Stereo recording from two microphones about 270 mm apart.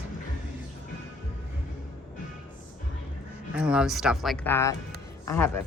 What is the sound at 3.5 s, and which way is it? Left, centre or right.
A man's voice, centre.